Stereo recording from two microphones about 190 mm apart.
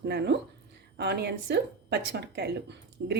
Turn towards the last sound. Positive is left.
turn(degrees=-65)  # may be behind; listen again after turning